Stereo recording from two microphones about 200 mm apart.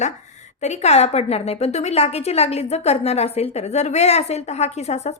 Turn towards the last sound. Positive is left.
turn(degrees=35)  # may be behind; listen again after turning